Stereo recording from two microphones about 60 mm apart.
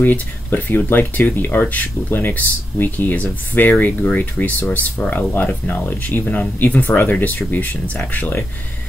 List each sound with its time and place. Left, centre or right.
0.0 s speech: left